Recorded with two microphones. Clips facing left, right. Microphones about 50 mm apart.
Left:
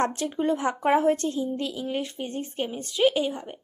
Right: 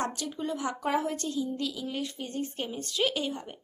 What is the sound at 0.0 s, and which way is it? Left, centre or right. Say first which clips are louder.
A woman's voice: left 7 dB; left.